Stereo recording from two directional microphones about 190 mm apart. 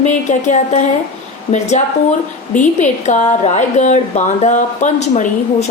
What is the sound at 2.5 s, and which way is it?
A woman's voice, 40° left (ahead or behind).